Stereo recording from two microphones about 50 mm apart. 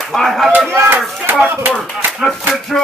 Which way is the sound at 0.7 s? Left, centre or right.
Right.